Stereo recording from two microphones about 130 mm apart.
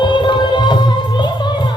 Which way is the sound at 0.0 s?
35° left (ahead or behind).